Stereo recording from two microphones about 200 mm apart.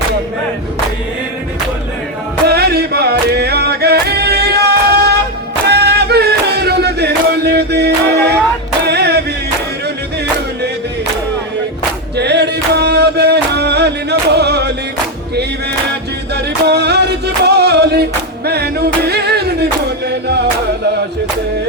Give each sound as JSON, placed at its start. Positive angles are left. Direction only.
{"t": 2.5, "sound": "music", "side_deg": -55}
{"t": 12.1, "sound": "music", "side_deg": -55}
{"t": 16.3, "sound": "music", "side_deg": -55}